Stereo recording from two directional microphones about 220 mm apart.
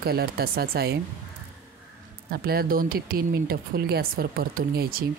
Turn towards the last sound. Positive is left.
turn(degrees=-45)  # may be behind; listen again after turning